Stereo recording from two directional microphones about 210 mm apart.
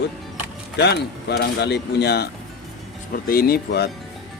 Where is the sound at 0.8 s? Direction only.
50° left (ahead or behind).